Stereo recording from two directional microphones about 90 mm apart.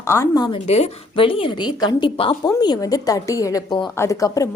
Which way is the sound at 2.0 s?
85° left.